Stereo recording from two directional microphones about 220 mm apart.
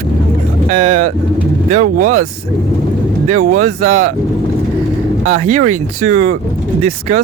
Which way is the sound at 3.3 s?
35° right (ahead or behind).